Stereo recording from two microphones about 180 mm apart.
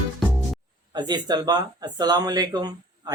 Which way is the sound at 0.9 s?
25° right (ahead or behind).